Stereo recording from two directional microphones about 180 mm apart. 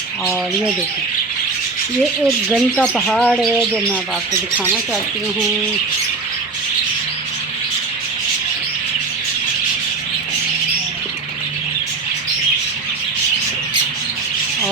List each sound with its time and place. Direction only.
2.2 s bird: 5° right (ahead or behind)
2.7 s speech: 5° left (ahead or behind)
3.3 s bird: centre (ahead or behind)
4.5 s speech: 10° right (ahead or behind)